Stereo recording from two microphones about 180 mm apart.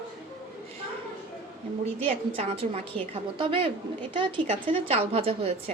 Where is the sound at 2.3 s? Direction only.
30° right (ahead or behind).